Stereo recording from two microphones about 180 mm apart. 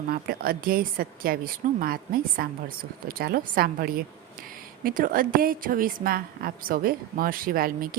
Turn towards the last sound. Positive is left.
turn(degrees=-55)  # may be behind; listen again after turning